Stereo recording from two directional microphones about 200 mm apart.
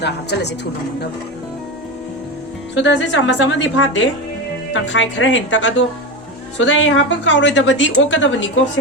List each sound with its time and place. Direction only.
0.0 s a woman's voice: 60° left (ahead or behind)
2.7 s a woman's voice: 65° left (ahead or behind)